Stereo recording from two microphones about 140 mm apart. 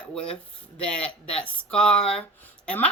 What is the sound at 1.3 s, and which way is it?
Speech, 10° left (ahead or behind).